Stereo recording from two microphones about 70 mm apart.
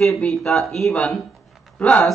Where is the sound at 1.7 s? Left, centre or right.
Centre.